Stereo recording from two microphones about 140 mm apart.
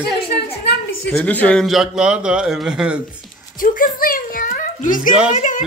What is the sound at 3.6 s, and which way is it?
A child's voice, 75° left (ahead or behind).